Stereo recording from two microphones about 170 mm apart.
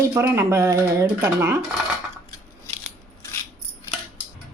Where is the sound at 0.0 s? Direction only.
15° right (ahead or behind).